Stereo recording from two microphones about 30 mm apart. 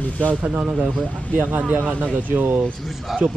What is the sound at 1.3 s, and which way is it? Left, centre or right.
Speech, right.